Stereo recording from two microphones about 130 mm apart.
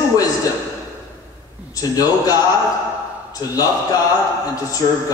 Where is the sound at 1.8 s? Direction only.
30° left (ahead or behind).